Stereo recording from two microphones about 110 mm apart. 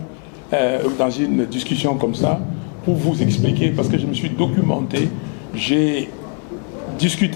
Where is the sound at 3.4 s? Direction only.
15° left (ahead or behind).